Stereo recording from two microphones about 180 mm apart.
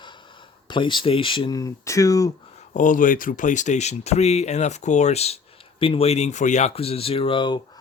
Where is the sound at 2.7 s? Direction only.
45° left (ahead or behind); by 7.6 s 25° left (ahead or behind).